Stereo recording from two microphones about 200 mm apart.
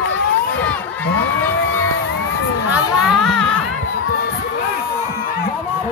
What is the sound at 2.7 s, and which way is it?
Crowd, centre (ahead or behind).